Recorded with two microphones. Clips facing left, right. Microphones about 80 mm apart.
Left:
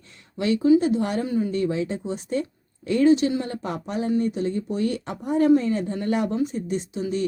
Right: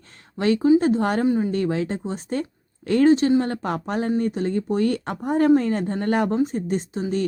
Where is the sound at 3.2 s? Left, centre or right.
Right.